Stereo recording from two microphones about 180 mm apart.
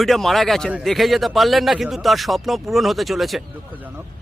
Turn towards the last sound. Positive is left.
turn(degrees=0)  # may be behind; listen again after turning